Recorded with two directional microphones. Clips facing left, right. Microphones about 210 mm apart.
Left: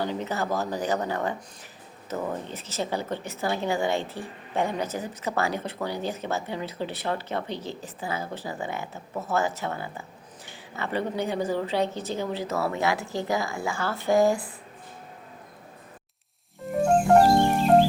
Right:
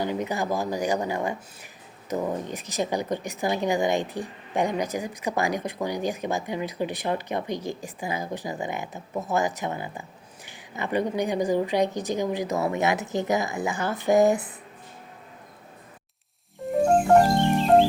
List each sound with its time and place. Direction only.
0.0 s a woman's voice: 15° right (ahead or behind)